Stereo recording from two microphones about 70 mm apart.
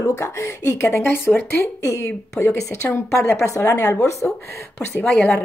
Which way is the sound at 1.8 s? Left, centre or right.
Left.